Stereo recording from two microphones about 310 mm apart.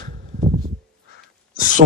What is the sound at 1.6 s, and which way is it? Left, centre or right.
Speech, right.